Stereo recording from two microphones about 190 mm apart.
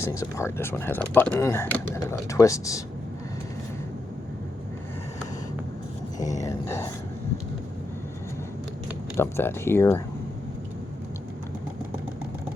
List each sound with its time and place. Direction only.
0.0 s speech: 15° left (ahead or behind)
6.1 s a sound: 40° left (ahead or behind)
6.4 s speech: 15° left (ahead or behind)
9.1 s speech: 15° left (ahead or behind)